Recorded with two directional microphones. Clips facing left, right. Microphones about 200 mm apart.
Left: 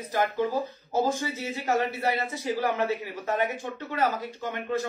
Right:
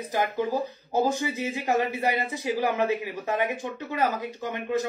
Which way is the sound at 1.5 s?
15° right (ahead or behind).